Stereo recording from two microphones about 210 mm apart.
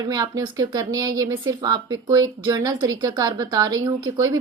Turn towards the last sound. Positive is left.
turn(degrees=-15)  # may be behind; listen again after turning